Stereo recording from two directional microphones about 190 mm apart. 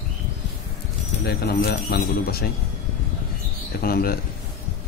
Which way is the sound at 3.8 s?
55° left (ahead or behind).